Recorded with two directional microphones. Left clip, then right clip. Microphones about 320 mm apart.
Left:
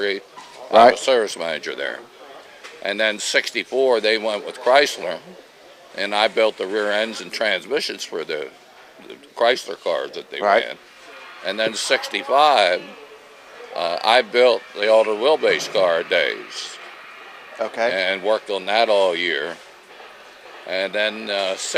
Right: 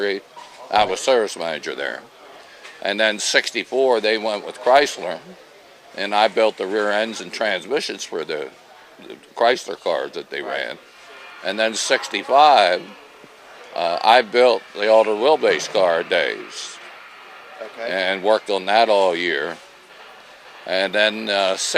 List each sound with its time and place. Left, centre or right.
0.7 s speech: centre
17.6 s a man's voice: left
17.9 s speech: centre
20.7 s speech: right